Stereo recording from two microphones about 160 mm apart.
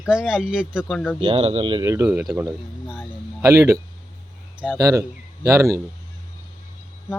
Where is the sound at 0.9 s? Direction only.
5° left (ahead or behind).